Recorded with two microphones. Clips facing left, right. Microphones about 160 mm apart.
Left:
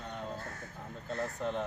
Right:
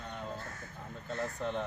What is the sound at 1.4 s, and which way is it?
Speech, centre (ahead or behind).